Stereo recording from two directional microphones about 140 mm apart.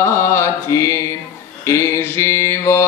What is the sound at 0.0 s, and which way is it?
Mantra, 20° left (ahead or behind).